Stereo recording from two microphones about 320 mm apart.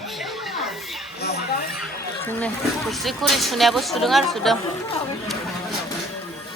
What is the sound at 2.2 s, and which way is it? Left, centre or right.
Speech, centre.